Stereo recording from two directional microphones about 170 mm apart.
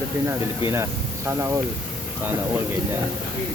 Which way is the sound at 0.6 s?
15° right (ahead or behind).